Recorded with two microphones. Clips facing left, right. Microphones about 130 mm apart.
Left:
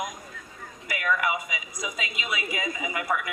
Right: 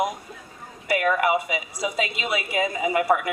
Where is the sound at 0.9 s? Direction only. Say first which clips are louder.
Right 6 dB; 35° right (ahead or behind).